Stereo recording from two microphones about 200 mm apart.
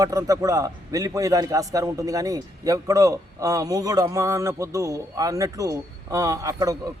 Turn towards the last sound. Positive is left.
turn(degrees=-15)  # may be behind; listen again after turning